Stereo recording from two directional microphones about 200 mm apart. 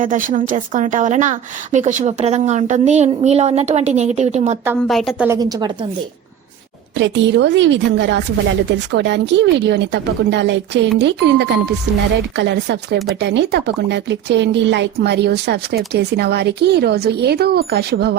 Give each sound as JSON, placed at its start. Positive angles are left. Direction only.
{"t": 0.0, "sound": "a woman's voice", "side_deg": -40}
{"t": 4.9, "sound": "a woman's voice", "side_deg": 0}
{"t": 5.3, "sound": "a woman's voice", "side_deg": -20}
{"t": 6.9, "sound": "speech", "side_deg": -65}